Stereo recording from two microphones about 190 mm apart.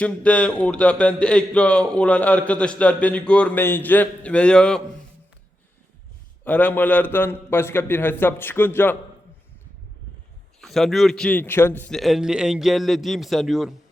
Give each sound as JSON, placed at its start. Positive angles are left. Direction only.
{"t": 0.0, "sound": "a man's voice", "side_deg": 5}
{"t": 6.4, "sound": "a man's voice", "side_deg": 10}
{"t": 10.6, "sound": "a man's voice", "side_deg": 0}